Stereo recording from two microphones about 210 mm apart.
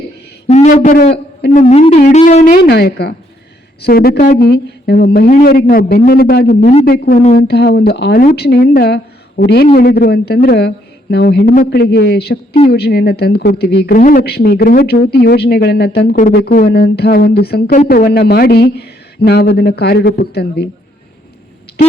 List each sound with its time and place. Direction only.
0.4 s music: 35° left (ahead or behind)
2.5 s a woman's voice: 50° left (ahead or behind)
6.7 s music: 40° left (ahead or behind)
7.3 s a woman's voice: 50° left (ahead or behind)